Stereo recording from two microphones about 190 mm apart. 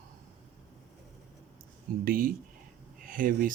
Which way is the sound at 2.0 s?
50° right (ahead or behind).